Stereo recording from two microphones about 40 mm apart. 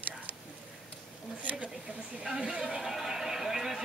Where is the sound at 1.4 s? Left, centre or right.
Right.